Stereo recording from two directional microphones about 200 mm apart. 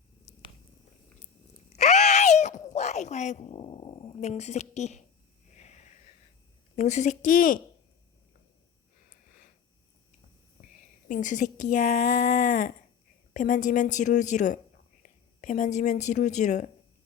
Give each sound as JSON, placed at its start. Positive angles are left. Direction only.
{"t": 1.7, "sound": "a sound", "side_deg": 35}
{"t": 6.7, "sound": "speech", "side_deg": 35}
{"t": 11.1, "sound": "speech", "side_deg": 40}